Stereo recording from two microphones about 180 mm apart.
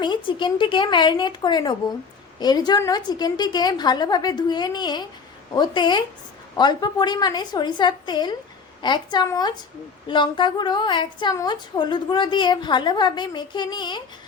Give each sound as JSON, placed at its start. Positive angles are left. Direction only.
{"t": 0.0, "sound": "a woman's voice", "side_deg": 25}